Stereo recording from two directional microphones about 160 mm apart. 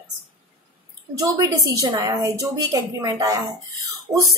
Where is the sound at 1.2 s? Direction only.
20° right (ahead or behind).